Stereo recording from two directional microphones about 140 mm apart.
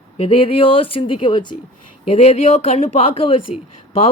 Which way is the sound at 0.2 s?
40° left (ahead or behind).